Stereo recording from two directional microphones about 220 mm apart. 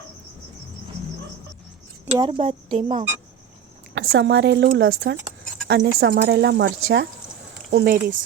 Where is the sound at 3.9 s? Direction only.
55° right (ahead or behind).